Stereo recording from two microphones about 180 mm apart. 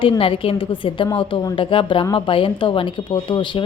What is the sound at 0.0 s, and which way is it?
A woman's voice, 30° left (ahead or behind).